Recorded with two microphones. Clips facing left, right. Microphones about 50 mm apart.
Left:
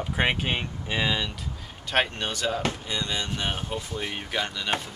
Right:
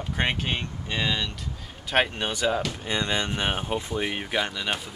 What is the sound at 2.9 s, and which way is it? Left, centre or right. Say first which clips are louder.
Speech: right 3 dB; right.